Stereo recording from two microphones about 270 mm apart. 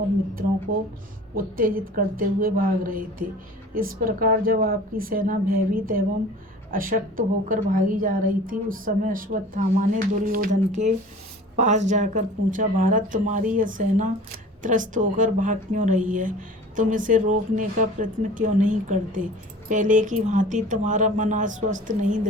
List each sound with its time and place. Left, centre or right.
1.4 s a woman's voice: right